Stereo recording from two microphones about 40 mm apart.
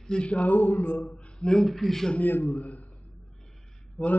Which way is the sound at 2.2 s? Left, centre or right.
Left.